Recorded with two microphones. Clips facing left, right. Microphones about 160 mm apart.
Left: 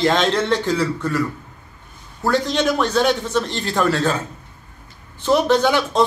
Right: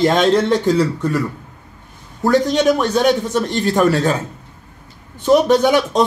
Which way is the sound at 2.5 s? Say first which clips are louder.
Right 3 dB; 15° right (ahead or behind).